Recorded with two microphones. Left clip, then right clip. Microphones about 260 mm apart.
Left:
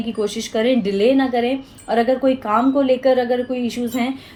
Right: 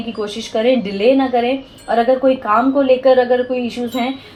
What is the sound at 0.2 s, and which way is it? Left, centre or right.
Speech, left.